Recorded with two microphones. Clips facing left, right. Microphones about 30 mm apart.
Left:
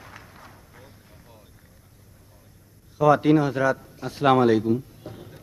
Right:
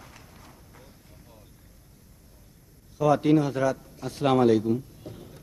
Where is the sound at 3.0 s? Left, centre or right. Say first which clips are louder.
Left 3 dB; centre.